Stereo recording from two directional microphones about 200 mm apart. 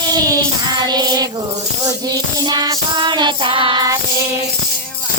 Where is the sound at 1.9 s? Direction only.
20° right (ahead or behind).